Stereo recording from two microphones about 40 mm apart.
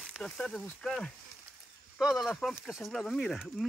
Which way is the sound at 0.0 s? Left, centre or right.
Centre.